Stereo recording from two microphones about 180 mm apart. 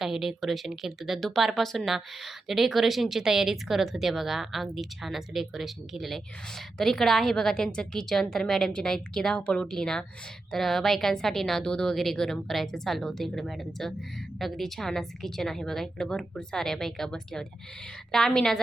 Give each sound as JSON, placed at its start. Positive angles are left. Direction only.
{"t": 0.0, "sound": "speech", "side_deg": 0}